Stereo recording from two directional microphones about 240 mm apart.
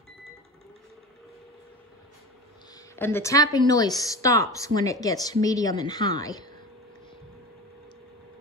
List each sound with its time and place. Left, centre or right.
3.0 s a woman's voice: centre